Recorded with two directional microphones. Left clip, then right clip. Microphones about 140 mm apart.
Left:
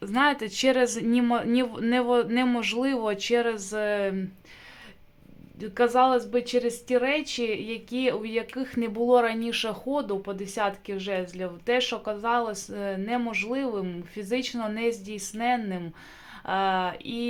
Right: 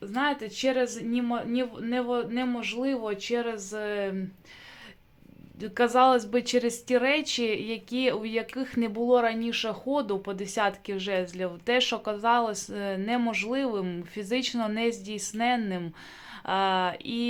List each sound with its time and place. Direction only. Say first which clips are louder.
0.0 s speech: left 5 dB; 35° left (ahead or behind); by 4.1 s 15° left (ahead or behind)
5.5 s speech: left 1 dB; centre (ahead or behind)
9.9 s a woman's voice: right 2 dB; 10° right (ahead or behind)